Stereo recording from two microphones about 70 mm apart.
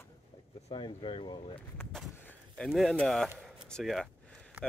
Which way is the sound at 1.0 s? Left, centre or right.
Left.